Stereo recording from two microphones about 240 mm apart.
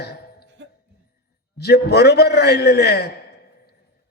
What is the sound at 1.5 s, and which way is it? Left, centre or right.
A man's voice, left.